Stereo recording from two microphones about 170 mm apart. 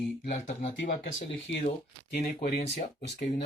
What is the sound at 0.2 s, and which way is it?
Speech, 50° left (ahead or behind).